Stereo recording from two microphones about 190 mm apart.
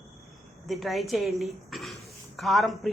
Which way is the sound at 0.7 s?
Centre (ahead or behind).